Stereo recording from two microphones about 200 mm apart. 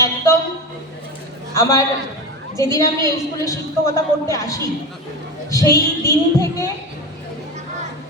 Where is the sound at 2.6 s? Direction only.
15° left (ahead or behind).